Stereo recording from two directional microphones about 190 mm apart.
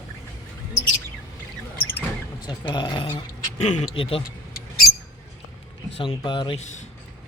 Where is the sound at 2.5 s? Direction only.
25° left (ahead or behind).